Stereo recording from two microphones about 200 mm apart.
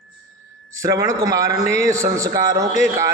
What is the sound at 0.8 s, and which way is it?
A man's voice, 15° right (ahead or behind).